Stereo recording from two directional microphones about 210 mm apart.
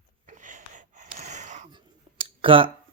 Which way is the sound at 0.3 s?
35° right (ahead or behind).